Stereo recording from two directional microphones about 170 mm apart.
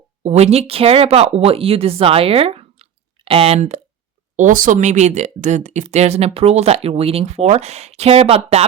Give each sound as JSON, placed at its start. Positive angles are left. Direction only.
{"t": 0.2, "sound": "speech", "side_deg": -40}
{"t": 4.4, "sound": "speech", "side_deg": -50}